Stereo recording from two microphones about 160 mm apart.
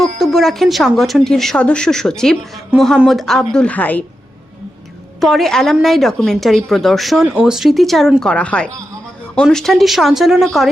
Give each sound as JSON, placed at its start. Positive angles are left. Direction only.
{"t": 0.2, "sound": "a woman's voice", "side_deg": 0}
{"t": 5.2, "sound": "a woman's voice", "side_deg": 0}